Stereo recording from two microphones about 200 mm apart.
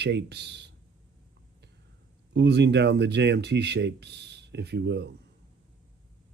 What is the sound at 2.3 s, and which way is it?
Speech, 60° right (ahead or behind).